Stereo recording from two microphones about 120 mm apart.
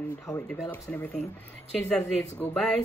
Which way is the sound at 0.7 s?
15° left (ahead or behind).